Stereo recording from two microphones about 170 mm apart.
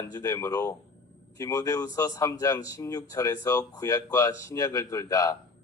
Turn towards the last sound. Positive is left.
turn(degrees=20)  # may be behind; listen again after turning